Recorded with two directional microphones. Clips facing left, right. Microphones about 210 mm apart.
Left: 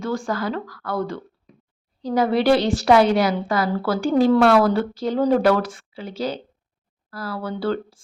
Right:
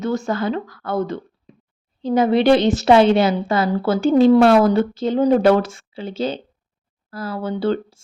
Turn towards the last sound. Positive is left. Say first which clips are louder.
# right 3 dB
turn(degrees=-20)  # may be behind; listen again after turning